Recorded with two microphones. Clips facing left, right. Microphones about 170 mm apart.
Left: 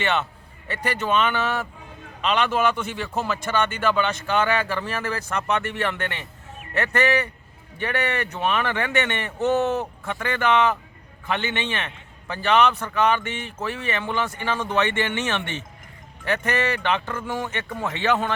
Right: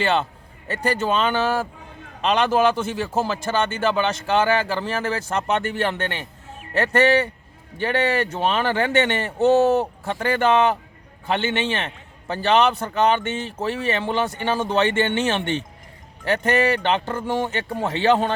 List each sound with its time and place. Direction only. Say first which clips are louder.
0.0 s a man's voice: right 3 dB; 30° right (ahead or behind)